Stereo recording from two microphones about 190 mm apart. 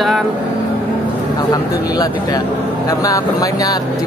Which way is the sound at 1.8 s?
20° left (ahead or behind).